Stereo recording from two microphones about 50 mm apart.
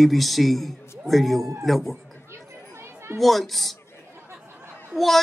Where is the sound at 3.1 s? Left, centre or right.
Centre.